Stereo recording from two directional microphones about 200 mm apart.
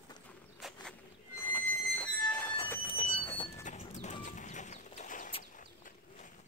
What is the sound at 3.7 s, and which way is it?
Bird, 35° left (ahead or behind).